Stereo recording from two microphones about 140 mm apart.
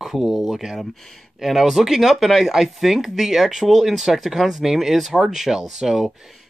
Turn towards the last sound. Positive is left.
turn(degrees=0)  # may be behind; listen again after turning